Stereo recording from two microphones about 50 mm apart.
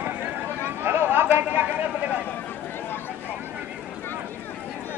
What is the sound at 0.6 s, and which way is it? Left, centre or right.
Chatter, right.